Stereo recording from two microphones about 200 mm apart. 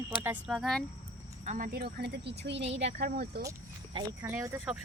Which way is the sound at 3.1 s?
50° right (ahead or behind).